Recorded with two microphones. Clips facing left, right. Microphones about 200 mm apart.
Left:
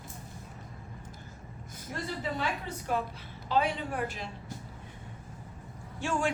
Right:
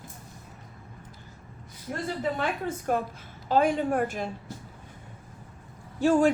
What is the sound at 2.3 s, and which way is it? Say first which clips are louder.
A woman's voice: right 5 dB; 50° right (ahead or behind).